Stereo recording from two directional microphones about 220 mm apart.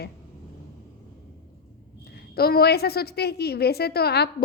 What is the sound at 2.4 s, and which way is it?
A woman's voice, 45° left (ahead or behind).